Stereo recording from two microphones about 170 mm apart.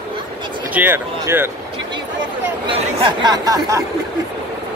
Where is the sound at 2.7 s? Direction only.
25° right (ahead or behind).